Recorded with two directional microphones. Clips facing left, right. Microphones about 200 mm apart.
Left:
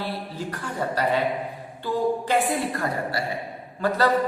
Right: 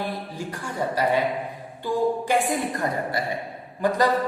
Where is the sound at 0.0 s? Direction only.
10° right (ahead or behind).